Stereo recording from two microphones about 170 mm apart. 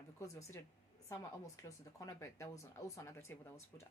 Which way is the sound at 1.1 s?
20° left (ahead or behind).